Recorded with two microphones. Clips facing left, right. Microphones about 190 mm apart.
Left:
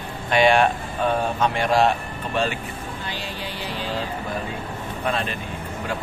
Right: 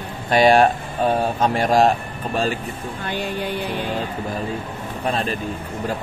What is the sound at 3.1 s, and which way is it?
Speech, 55° right (ahead or behind).